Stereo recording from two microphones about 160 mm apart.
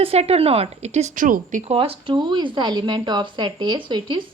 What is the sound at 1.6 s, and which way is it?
Speech, 40° right (ahead or behind).